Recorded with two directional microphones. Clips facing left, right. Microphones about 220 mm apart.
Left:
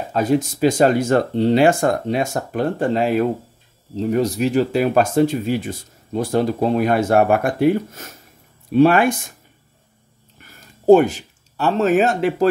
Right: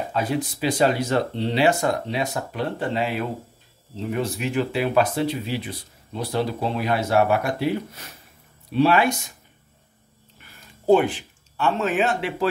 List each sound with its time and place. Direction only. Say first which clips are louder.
0.1 s speech: left 10 dB; 45° left (ahead or behind)
10.4 s speech: left 8 dB; 45° left (ahead or behind)